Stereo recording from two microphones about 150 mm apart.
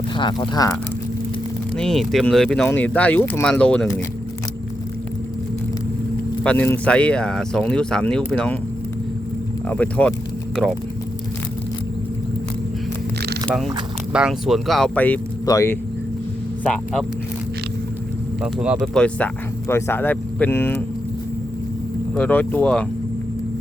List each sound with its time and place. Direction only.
0.2 s speech: 30° left (ahead or behind)
1.7 s speech: 5° left (ahead or behind)
6.4 s speech: 10° left (ahead or behind)
9.6 s speech: 10° left (ahead or behind)
14.1 s speech: 5° right (ahead or behind); by 15.8 s 20° left (ahead or behind)
16.6 s speech: 5° left (ahead or behind)
18.4 s speech: 5° right (ahead or behind)
18.9 s speech: 10° left (ahead or behind)
22.1 s speech: 10° left (ahead or behind)